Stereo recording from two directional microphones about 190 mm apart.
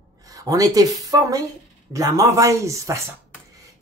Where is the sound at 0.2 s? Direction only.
20° right (ahead or behind).